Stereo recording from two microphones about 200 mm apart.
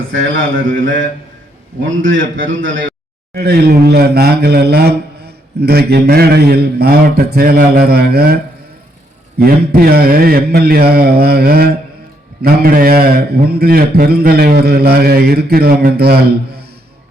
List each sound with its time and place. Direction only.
0.1 s a man's voice: 75° right (ahead or behind)
3.3 s speech: 50° right (ahead or behind)
9.4 s speech: 50° right (ahead or behind)